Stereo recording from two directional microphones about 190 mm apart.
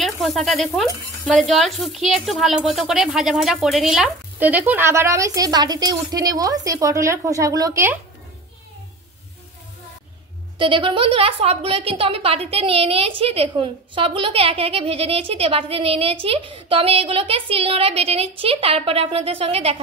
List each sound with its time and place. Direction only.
0.0 s speech: centre (ahead or behind)
10.6 s a woman's voice: 25° right (ahead or behind)